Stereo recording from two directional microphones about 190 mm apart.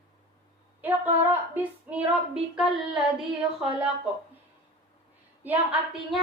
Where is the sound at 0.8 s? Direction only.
10° right (ahead or behind).